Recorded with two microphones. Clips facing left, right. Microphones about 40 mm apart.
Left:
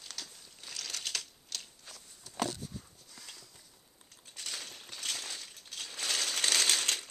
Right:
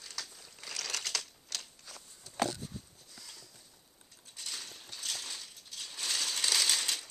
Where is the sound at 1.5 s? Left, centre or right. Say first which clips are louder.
Right 1 dB; right.